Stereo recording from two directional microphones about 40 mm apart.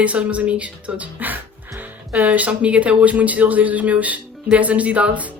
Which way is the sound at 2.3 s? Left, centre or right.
Right.